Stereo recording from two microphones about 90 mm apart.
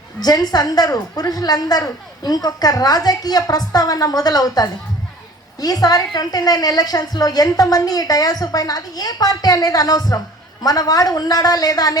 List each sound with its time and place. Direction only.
0.2 s a woman's voice: 45° left (ahead or behind)